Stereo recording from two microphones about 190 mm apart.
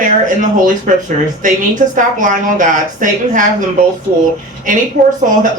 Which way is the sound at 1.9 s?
45° right (ahead or behind).